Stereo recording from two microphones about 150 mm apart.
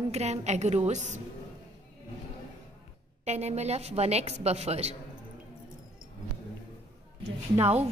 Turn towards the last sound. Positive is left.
turn(degrees=-45)  # may be behind; listen again after turning